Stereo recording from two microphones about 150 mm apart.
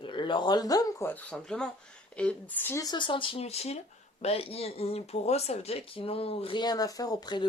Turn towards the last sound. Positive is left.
turn(degrees=30)  # may be behind; listen again after turning